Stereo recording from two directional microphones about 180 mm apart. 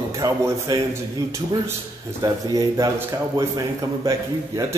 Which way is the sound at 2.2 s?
20° right (ahead or behind).